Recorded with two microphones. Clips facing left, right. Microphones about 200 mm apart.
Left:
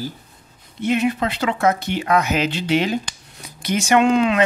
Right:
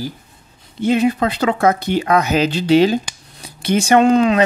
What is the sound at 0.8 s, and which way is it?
Speech, 35° right (ahead or behind).